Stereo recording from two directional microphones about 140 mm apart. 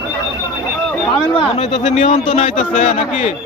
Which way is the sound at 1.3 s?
45° left (ahead or behind).